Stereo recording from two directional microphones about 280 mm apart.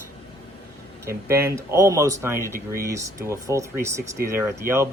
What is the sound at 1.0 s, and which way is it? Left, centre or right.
Speech, centre.